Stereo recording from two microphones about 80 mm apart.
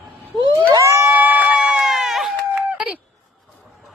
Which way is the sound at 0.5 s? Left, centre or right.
Right.